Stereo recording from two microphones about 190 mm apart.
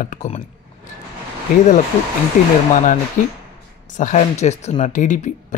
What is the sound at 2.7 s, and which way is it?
Speech, 40° left (ahead or behind).